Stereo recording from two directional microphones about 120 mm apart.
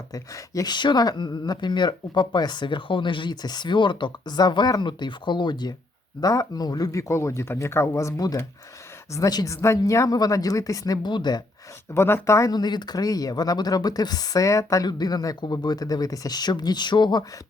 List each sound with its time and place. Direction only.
0.1 s speech: 30° left (ahead or behind)
11.9 s speech: 20° left (ahead or behind); by 17.2 s 40° left (ahead or behind)